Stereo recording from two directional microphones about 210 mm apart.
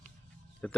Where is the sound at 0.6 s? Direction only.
5° left (ahead or behind).